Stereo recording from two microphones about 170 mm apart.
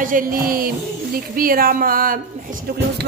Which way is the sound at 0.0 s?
55° right (ahead or behind).